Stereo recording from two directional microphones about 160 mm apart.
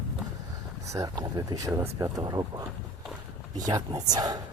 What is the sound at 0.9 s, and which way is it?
Speech, 20° right (ahead or behind).